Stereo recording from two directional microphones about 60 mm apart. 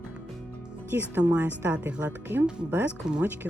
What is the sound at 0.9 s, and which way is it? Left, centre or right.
A woman's voice, right.